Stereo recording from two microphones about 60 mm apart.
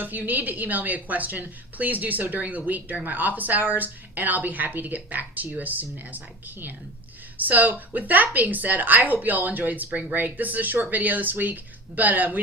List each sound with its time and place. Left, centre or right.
0.0 s a woman's voice: right